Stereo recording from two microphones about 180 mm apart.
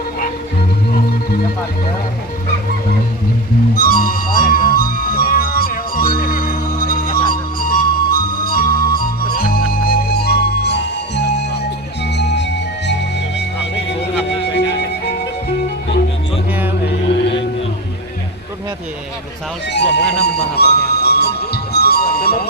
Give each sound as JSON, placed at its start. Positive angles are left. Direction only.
{"t": 3.8, "sound": "music", "side_deg": 50}
{"t": 14.3, "sound": "music", "side_deg": 70}
{"t": 19.7, "sound": "music", "side_deg": 70}